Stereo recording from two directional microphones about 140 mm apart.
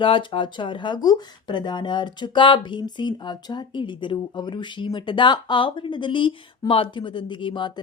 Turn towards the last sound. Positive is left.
turn(degrees=35)  # may be behind; listen again after turning